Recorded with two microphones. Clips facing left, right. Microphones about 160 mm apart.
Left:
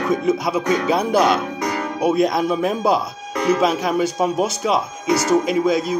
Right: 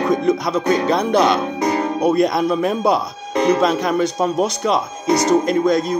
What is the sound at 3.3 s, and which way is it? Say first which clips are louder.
Music: right 3 dB; 30° right (ahead or behind).